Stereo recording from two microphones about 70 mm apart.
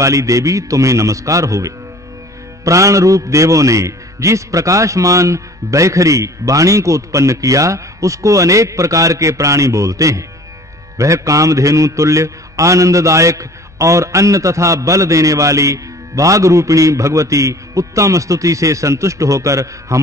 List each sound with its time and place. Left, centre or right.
0.0 s a man's voice: right